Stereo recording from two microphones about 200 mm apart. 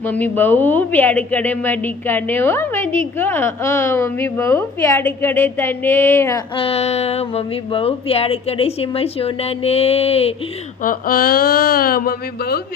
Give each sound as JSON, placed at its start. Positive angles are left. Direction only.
{"t": 0.0, "sound": "a woman's voice", "side_deg": 10}
{"t": 6.6, "sound": "speech", "side_deg": 30}
{"t": 10.8, "sound": "speech", "side_deg": 45}